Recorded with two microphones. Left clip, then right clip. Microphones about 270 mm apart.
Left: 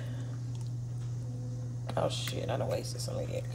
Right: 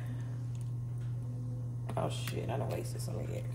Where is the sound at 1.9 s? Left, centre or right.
Left.